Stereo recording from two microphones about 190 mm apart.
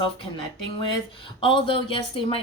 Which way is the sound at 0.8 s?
25° left (ahead or behind).